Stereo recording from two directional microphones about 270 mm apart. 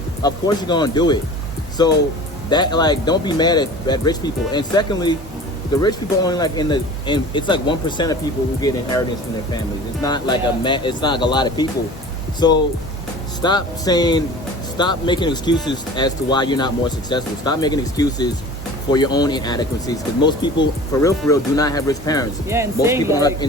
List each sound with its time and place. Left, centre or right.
0.2 s speech: centre
10.0 s speech: centre
22.4 s speech: centre
23.1 s speech: centre